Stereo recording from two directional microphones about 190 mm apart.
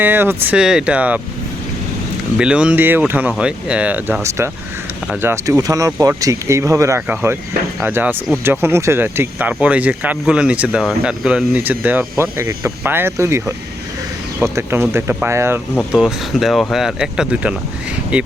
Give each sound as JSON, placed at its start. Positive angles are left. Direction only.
{"t": 0.0, "sound": "speech", "side_deg": -10}
{"t": 2.4, "sound": "speech", "side_deg": -5}
{"t": 14.4, "sound": "speech", "side_deg": -15}